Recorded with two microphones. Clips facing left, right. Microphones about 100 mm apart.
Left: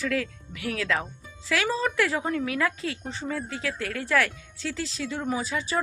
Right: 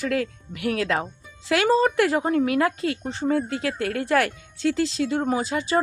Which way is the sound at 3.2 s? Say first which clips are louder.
Right 8 dB; 50° right (ahead or behind).